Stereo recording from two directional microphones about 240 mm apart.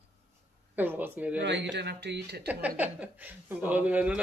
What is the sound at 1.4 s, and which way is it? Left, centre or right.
Speech, right.